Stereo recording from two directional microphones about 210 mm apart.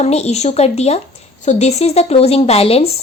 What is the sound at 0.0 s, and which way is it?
Speech, 30° left (ahead or behind).